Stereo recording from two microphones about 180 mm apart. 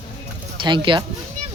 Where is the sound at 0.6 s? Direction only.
25° right (ahead or behind).